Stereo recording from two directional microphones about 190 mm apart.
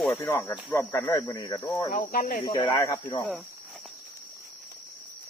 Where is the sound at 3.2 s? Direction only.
Centre (ahead or behind).